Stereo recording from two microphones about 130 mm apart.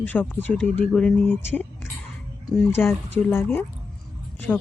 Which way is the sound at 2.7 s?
20° left (ahead or behind).